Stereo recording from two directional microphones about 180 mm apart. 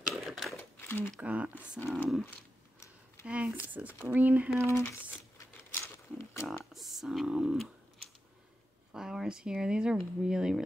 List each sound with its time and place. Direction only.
0.1 s crumpling: centre (ahead or behind)
0.6 s crumpling: 15° left (ahead or behind)
1.2 s speech: 10° right (ahead or behind)
3.3 s speech: 5° right (ahead or behind)
4.6 s speech: 15° left (ahead or behind)
5.4 s a sound: 15° left (ahead or behind)
6.4 s speech: centre (ahead or behind)
8.9 s speech: 5° right (ahead or behind)